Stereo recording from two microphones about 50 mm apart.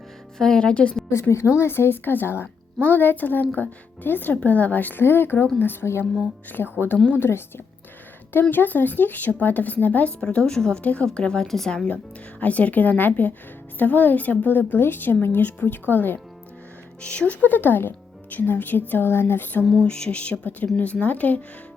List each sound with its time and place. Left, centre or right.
0.3 s a woman's voice: centre
0.7 s speech: left
1.3 s speech: left
4.4 s speech: left
5.8 s speech: left
6.5 s speech: left
10.2 s a woman's voice: centre
10.8 s speech: left
11.4 s speech: centre
12.4 s speech: left
17.0 s speech: left
19.8 s speech: left